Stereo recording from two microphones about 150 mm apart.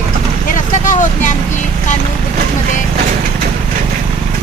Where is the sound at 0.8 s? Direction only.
55° left (ahead or behind).